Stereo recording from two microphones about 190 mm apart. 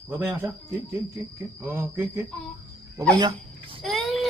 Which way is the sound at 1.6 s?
10° right (ahead or behind).